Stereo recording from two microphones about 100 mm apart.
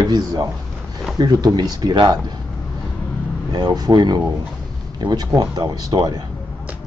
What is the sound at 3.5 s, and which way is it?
Speech, 45° right (ahead or behind).